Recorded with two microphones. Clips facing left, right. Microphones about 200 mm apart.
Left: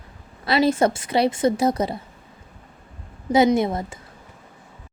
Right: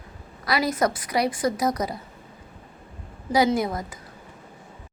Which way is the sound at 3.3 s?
25° left (ahead or behind).